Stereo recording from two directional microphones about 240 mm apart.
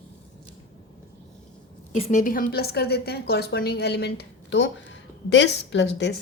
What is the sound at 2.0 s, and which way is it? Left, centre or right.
A woman's voice, left.